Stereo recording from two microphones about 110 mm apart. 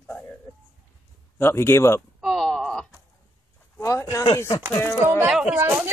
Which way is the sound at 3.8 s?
30° left (ahead or behind).